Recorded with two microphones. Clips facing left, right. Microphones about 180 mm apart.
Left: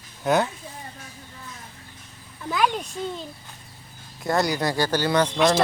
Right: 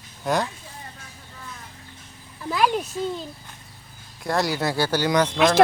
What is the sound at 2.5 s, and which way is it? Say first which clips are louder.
Speech: right 2 dB; 5° right (ahead or behind).